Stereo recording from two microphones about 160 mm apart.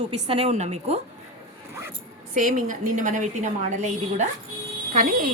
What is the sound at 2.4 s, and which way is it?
A woman's voice, 55° right (ahead or behind).